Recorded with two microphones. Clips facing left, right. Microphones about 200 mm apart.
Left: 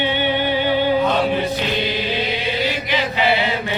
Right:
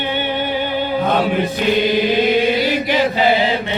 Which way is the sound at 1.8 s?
50° right (ahead or behind).